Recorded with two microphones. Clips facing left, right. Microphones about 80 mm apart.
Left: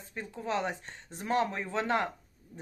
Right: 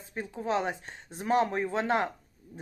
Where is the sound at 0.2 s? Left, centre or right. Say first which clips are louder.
Right 3 dB; centre.